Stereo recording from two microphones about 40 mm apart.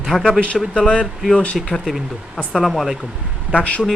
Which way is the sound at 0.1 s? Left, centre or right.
Centre.